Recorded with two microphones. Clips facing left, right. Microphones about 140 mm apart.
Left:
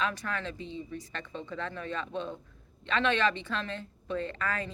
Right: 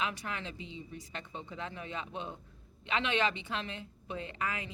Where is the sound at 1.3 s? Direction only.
65° left (ahead or behind).